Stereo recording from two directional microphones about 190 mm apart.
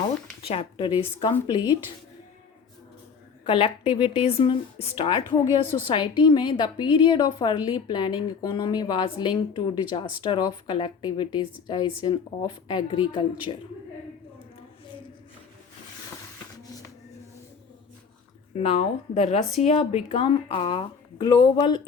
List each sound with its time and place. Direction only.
0.4 s a woman's voice: 30° left (ahead or behind)
3.4 s a woman's voice: 30° left (ahead or behind)
18.6 s a woman's voice: 35° left (ahead or behind)